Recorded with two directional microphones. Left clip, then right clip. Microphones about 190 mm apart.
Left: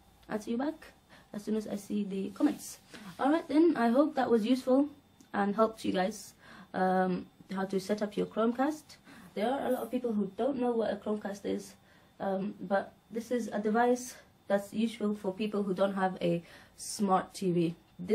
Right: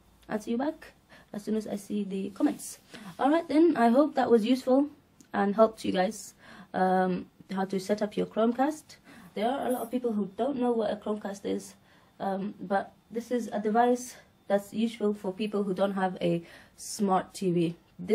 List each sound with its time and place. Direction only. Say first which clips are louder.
0.3 s a woman's voice: right 3 dB; 20° right (ahead or behind)